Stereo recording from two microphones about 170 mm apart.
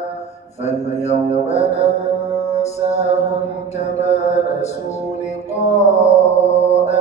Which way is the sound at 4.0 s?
40° left (ahead or behind).